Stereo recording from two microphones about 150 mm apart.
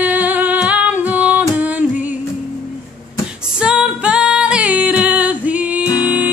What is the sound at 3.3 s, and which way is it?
Female singing, 5° right (ahead or behind).